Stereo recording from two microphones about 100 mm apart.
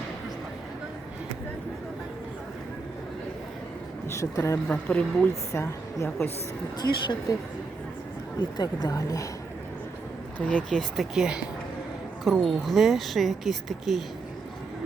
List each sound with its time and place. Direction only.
4.1 s speech: 30° left (ahead or behind)
4.7 s speech: 10° left (ahead or behind)
5.3 s a woman's voice: 30° left (ahead or behind)
6.8 s speech: 50° left (ahead or behind)
8.4 s speech: 45° left (ahead or behind)
10.7 s speech: centre (ahead or behind)